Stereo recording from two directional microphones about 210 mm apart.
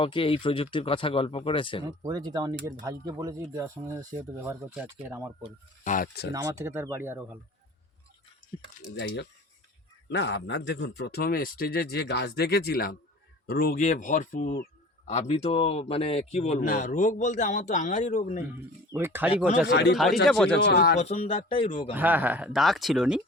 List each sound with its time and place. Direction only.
0.0 s speech: 25° left (ahead or behind)
1.8 s speech: 20° right (ahead or behind)
5.8 s speech: 40° left (ahead or behind)
6.3 s speech: 15° right (ahead or behind)
10.1 s speech: 55° left (ahead or behind); by 18.4 s 35° left (ahead or behind)
18.9 s speech: 10° right (ahead or behind)
19.6 s speech: 50° left (ahead or behind)
20.2 s speech: centre (ahead or behind)
20.7 s speech: 50° left (ahead or behind)
21.0 s speech: 30° left (ahead or behind)
21.9 s speech: 10° right (ahead or behind)